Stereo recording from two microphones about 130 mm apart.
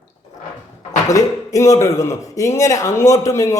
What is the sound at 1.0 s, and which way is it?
A man's voice, 25° left (ahead or behind).